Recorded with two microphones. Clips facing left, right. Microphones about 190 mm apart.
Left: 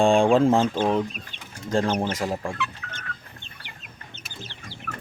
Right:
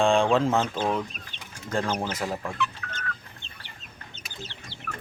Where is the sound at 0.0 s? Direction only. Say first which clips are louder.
Left 3 dB; 15° left (ahead or behind).